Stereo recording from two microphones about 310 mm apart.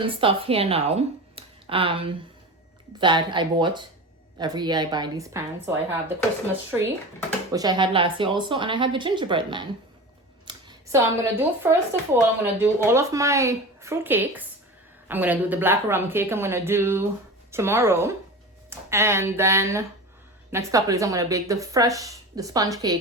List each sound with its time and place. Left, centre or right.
0.0 s speech: centre